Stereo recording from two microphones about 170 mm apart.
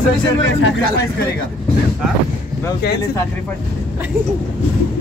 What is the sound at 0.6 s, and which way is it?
Speech, 70° left (ahead or behind).